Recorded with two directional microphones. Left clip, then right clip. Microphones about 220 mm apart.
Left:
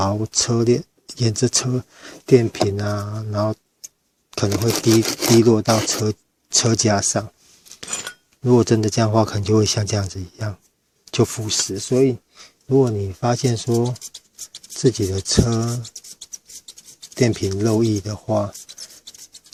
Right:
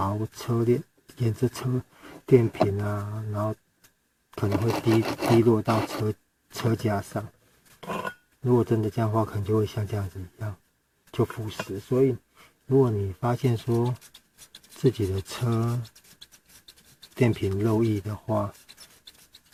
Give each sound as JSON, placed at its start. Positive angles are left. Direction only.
{"t": 0.0, "sound": "speech", "side_deg": 30}
{"t": 4.4, "sound": "speech", "side_deg": -15}
{"t": 5.4, "sound": "speech", "side_deg": 25}
{"t": 8.4, "sound": "speech", "side_deg": 35}
{"t": 17.2, "sound": "speech", "side_deg": 20}